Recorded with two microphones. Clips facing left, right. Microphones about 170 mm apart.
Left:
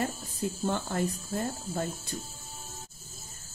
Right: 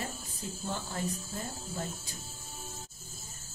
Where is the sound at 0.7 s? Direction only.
65° left (ahead or behind).